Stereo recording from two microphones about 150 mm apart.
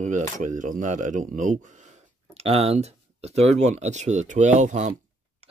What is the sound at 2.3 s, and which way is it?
Speech, 45° right (ahead or behind).